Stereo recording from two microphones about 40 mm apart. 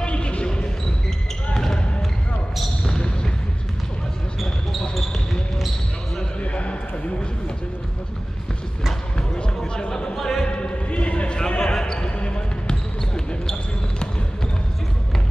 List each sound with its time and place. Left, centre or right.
0.0 s basketball bounce: left
1.5 s basketball bounce: centre
4.9 s basketball bounce: centre
6.4 s a sound: left
9.1 s basketball bounce: left
9.6 s a sound: centre
10.1 s music: centre
10.4 s basketball bounce: left
11.3 s basketball bounce: left